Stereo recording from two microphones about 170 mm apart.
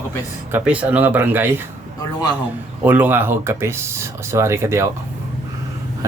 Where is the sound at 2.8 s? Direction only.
10° right (ahead or behind).